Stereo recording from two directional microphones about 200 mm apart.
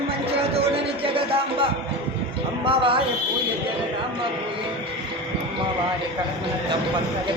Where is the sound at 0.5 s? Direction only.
30° right (ahead or behind).